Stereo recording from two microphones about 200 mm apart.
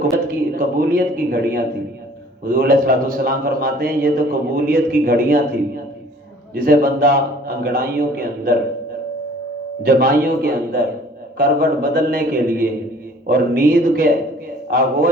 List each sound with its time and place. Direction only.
0.5 s a man's voice: 45° right (ahead or behind)
9.8 s a man's voice: 45° right (ahead or behind)